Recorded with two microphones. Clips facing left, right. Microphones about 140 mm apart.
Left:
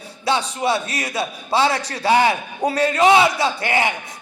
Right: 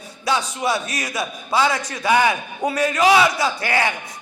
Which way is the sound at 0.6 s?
25° left (ahead or behind).